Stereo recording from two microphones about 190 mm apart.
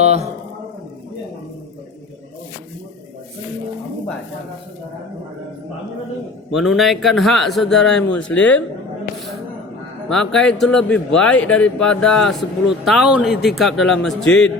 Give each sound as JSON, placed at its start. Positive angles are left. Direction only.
{"t": 0.0, "sound": "a sound", "side_deg": -35}
{"t": 6.5, "sound": "a man's voice", "side_deg": 0}
{"t": 10.1, "sound": "a man's voice", "side_deg": 5}